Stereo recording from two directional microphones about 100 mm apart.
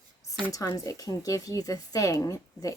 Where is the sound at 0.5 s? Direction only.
35° left (ahead or behind).